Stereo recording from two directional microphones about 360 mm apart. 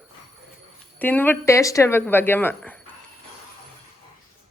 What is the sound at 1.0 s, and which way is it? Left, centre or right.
Speech, centre.